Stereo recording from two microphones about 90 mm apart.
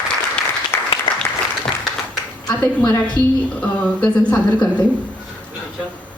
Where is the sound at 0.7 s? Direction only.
25° left (ahead or behind).